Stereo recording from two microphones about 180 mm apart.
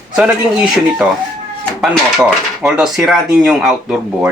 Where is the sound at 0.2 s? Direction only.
5° right (ahead or behind).